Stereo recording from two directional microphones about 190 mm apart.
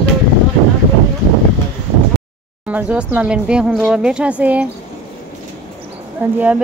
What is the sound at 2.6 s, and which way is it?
Speech, 5° right (ahead or behind).